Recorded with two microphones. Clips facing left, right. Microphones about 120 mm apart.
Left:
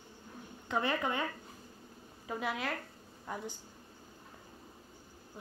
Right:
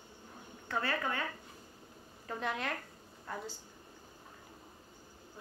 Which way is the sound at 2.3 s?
5° left (ahead or behind).